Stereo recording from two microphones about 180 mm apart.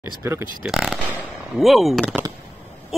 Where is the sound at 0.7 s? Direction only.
5° right (ahead or behind).